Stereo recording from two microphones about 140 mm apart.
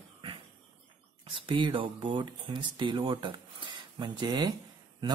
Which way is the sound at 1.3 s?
35° right (ahead or behind).